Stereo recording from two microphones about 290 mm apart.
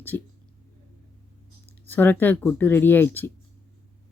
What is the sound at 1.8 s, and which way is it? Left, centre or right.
Speech, centre.